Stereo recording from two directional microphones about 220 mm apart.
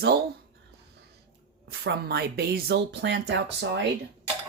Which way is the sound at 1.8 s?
45° right (ahead or behind).